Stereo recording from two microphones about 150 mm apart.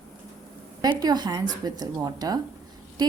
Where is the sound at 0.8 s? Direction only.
25° right (ahead or behind).